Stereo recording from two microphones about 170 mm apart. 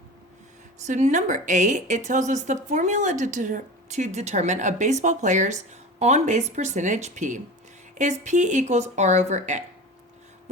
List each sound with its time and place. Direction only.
0.9 s speech: 45° right (ahead or behind)